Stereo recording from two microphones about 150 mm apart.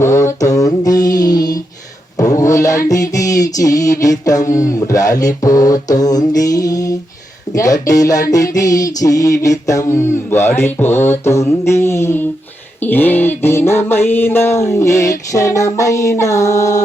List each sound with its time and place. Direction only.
0.0 s mantra: 20° left (ahead or behind)
8.3 s music: 25° left (ahead or behind)
12.8 s mantra: 15° left (ahead or behind)